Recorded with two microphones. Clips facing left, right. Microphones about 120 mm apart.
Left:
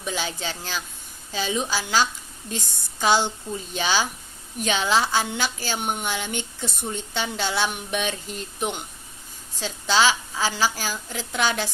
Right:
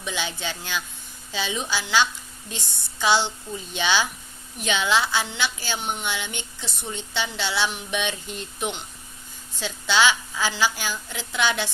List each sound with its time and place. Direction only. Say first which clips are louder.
0.0 s a woman's voice: left 1 dB; 40° left (ahead or behind)
9.6 s a woman's voice: even; 35° left (ahead or behind)